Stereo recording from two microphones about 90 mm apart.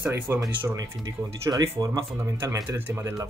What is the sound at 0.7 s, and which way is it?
Speech, 45° right (ahead or behind).